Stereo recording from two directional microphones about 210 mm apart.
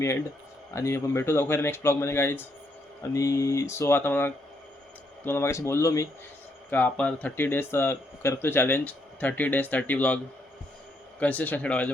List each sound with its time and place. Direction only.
0.7 s speech: 15° left (ahead or behind)
11.2 s speech: 5° left (ahead or behind)